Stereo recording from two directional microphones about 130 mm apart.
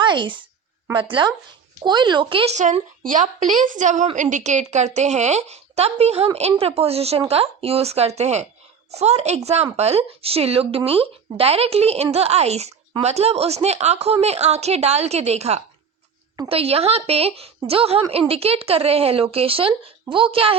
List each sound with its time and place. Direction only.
0.0 s a woman's voice: 40° right (ahead or behind)
3.0 s a woman's voice: 85° right; by 20.6 s 45° right (ahead or behind)